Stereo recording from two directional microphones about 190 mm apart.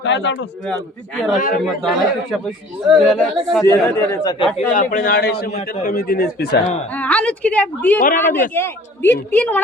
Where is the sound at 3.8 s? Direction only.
15° left (ahead or behind).